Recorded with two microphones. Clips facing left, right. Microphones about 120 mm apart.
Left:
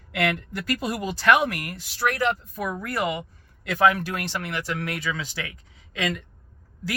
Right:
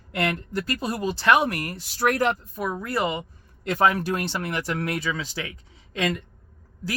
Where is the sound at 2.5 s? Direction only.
30° right (ahead or behind).